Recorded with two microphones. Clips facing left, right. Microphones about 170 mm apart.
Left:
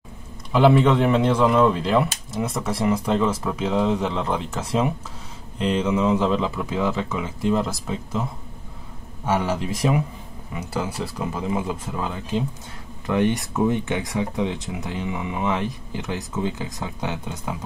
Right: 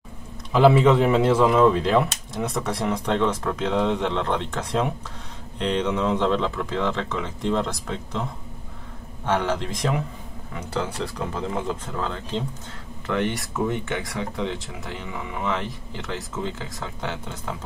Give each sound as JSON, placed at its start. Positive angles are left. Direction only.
{"t": 0.5, "sound": "speech", "side_deg": 0}